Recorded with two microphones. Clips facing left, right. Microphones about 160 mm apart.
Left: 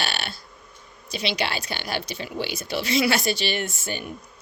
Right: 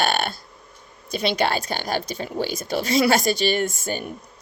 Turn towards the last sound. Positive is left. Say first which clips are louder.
# right 5 dB
turn(degrees=-45)  # may be behind; listen again after turning